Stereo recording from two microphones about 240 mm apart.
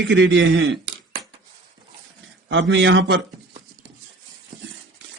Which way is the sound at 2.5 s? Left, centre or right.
Right.